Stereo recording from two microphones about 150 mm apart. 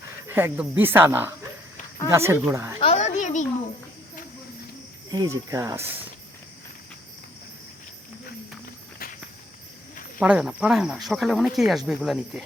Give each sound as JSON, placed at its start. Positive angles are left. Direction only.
{"t": 0.3, "sound": "speech", "side_deg": -15}
{"t": 2.8, "sound": "a sound", "side_deg": 50}
{"t": 5.1, "sound": "speech", "side_deg": -25}
{"t": 10.2, "sound": "speech", "side_deg": -5}